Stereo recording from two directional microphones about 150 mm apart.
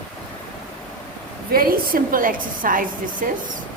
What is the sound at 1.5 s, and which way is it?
Speech, 75° right (ahead or behind).